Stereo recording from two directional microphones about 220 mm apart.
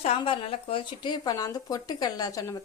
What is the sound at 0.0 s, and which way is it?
Speech, 25° left (ahead or behind).